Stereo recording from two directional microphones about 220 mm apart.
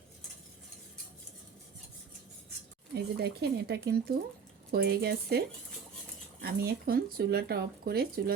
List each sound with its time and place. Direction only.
2.9 s speech: 45° right (ahead or behind)
6.4 s speech: 45° right (ahead or behind)